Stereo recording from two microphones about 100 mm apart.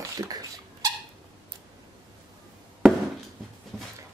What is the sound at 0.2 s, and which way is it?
Dog, 40° right (ahead or behind).